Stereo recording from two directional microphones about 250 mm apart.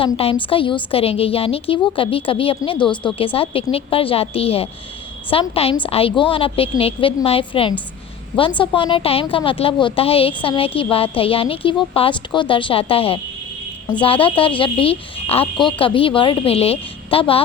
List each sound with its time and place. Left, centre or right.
0.0 s speech: left